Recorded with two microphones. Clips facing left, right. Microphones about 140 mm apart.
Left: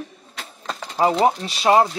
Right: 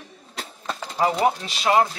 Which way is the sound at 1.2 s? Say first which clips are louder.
Left 3 dB; 30° left (ahead or behind).